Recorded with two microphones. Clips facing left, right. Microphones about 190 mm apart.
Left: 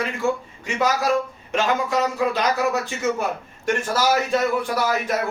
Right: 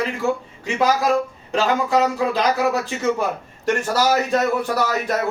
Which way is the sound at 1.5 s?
35° right (ahead or behind).